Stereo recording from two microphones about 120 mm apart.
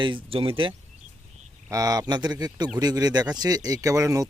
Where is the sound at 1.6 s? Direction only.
30° right (ahead or behind).